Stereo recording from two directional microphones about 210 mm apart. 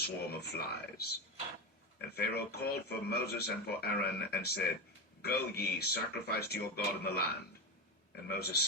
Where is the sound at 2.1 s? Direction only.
50° left (ahead or behind).